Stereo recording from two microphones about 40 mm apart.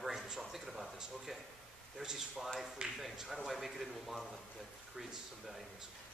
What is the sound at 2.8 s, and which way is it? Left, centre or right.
Speech, right.